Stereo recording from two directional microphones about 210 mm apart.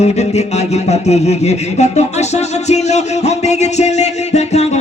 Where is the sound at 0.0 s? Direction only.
30° left (ahead or behind).